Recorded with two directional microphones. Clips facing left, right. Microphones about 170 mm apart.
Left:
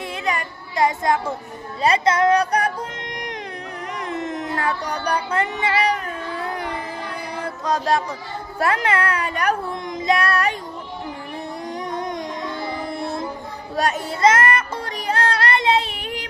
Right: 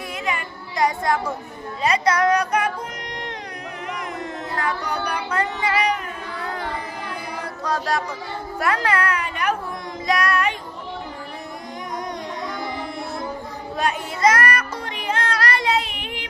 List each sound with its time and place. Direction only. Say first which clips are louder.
0.3 s child singing: left 3 dB; 35° left (ahead or behind)
0.8 s a woman's voice: left 2 dB; 25° left (ahead or behind)
1.8 s music: left 2 dB; 30° left (ahead or behind)
4.2 s music: left 3 dB; 20° left (ahead or behind)
4.6 s music: right 1 dB; 35° left (ahead or behind)
6.4 s music: even; 20° left (ahead or behind)
7.6 s a woman's voice: left 3 dB; 25° left (ahead or behind); by 9.6 s 40° left (ahead or behind)
10.1 s child singing: left 1 dB; 30° left (ahead or behind)
13.7 s a child's voice: left 2 dB; 40° left (ahead or behind)
14.3 s music: left 2 dB; 25° left (ahead or behind)
15.0 s child singing: left 2 dB; 35° left (ahead or behind)